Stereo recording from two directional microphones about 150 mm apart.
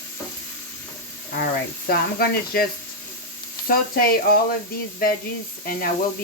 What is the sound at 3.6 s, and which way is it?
Speech, 75° left (ahead or behind).